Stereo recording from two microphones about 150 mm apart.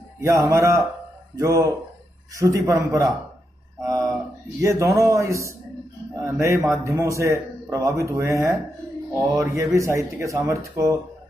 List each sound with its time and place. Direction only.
0.5 s speech: 20° right (ahead or behind)